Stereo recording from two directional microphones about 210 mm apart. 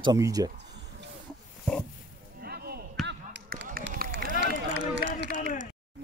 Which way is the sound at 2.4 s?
50° right (ahead or behind).